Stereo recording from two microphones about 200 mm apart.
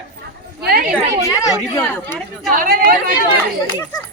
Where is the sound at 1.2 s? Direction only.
15° left (ahead or behind).